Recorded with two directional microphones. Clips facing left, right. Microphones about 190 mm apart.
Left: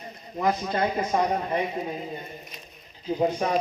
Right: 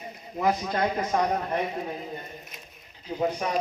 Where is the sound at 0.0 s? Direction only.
5° right (ahead or behind).